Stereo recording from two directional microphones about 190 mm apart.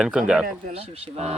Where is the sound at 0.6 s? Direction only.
30° right (ahead or behind).